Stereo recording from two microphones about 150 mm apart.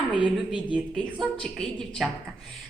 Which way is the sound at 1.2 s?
5° left (ahead or behind).